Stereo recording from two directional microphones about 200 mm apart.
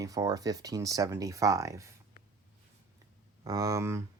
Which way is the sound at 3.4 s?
15° right (ahead or behind).